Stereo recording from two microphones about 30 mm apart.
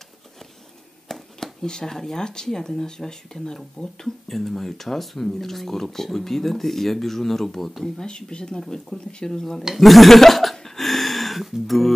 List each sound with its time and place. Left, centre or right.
1.0 s speech: centre
8.0 s speech: left
9.8 s a sound: centre